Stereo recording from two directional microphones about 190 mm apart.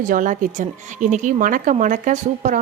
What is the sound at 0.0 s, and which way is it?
A woman's voice, 45° right (ahead or behind).